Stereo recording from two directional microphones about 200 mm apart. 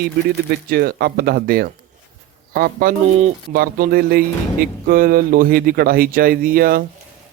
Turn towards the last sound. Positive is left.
turn(degrees=-45)  # may be behind; listen again after turning